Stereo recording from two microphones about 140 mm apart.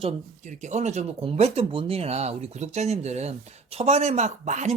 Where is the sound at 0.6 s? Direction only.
55° right (ahead or behind).